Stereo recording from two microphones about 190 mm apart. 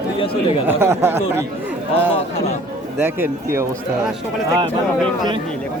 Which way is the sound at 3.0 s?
10° right (ahead or behind).